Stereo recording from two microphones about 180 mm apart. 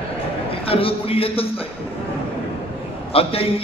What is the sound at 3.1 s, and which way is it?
Speech, 30° left (ahead or behind).